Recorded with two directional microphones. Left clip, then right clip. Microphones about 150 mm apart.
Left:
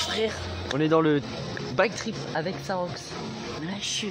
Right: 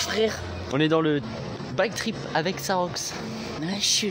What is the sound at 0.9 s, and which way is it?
Speech, 15° left (ahead or behind).